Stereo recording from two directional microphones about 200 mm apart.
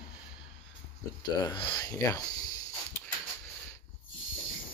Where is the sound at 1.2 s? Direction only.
25° left (ahead or behind).